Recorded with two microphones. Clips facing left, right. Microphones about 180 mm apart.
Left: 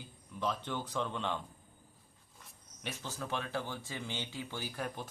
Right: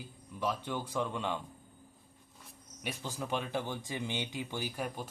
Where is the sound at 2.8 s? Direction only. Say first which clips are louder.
Right 2 dB; 15° right (ahead or behind).